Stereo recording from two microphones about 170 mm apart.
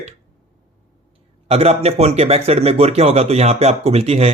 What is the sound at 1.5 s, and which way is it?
Speech, 35° right (ahead or behind).